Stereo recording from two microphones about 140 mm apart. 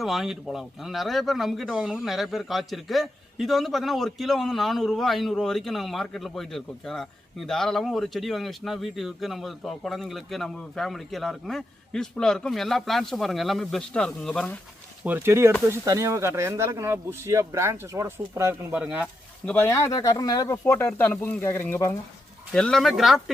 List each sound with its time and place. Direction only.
0.0 s speech: centre (ahead or behind)
15.0 s speech: 15° right (ahead or behind)
18.8 s speech: 10° right (ahead or behind)
19.5 s speech: 10° left (ahead or behind)
19.7 s speech: 25° left (ahead or behind)
22.5 s speech: 5° left (ahead or behind)